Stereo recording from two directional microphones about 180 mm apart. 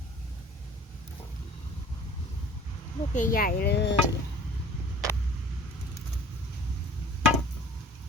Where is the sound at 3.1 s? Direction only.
50° left (ahead or behind); by 4.0 s 70° left (ahead or behind).